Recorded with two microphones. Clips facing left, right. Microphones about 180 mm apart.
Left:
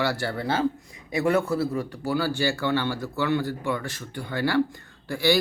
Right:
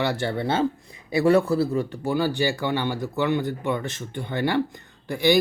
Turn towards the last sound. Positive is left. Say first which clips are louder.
# right 2 dB
turn(degrees=-20)  # may be behind; listen again after turning